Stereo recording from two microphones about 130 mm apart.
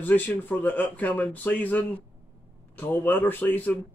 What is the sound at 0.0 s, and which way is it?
Speech, 15° left (ahead or behind).